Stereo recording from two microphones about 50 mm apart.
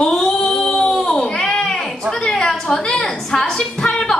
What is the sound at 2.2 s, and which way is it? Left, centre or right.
A woman's voice, centre.